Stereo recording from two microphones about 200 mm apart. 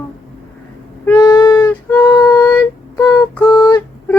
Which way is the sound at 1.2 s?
20° left (ahead or behind).